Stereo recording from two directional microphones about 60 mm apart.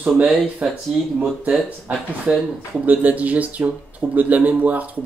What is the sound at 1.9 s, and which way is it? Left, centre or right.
Speech, right.